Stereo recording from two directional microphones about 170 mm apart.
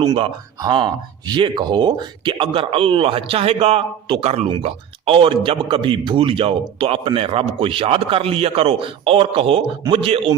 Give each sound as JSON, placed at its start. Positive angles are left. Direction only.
{"t": 0.0, "sound": "a man's voice", "side_deg": -25}